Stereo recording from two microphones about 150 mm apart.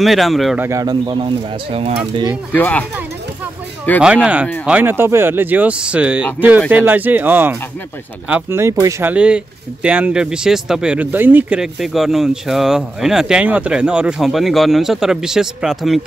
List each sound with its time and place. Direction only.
0.0 s speech: centre (ahead or behind)
0.6 s speech: 20° right (ahead or behind)
1.7 s speech: 40° right (ahead or behind)
2.5 s speech: 10° left (ahead or behind)
4.0 s speech: 5° right (ahead or behind)
9.1 s speech: 5° right (ahead or behind)